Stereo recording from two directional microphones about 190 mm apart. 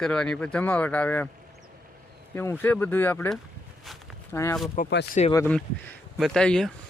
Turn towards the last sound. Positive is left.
turn(degrees=5)  # may be behind; listen again after turning